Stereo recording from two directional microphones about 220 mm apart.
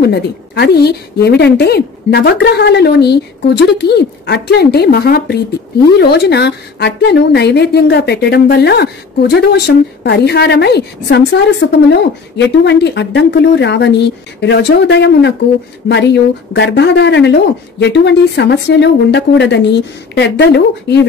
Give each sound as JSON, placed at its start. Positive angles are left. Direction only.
{"t": 0.0, "sound": "a woman's voice", "side_deg": 50}